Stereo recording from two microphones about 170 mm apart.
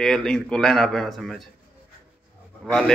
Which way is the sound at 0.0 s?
5° left (ahead or behind).